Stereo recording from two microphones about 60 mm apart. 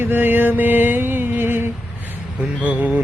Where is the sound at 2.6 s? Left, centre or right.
Right.